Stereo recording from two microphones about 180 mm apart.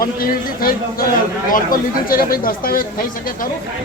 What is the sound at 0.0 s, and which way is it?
A man's voice, 55° left (ahead or behind).